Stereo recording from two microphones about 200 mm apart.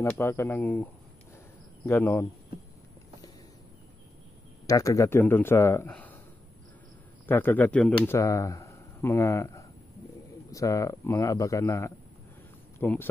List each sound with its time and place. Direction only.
0.0 s a man's voice: 10° left (ahead or behind)
1.9 s a man's voice: 10° left (ahead or behind)
4.6 s a man's voice: 15° left (ahead or behind)
7.2 s a man's voice: 10° left (ahead or behind)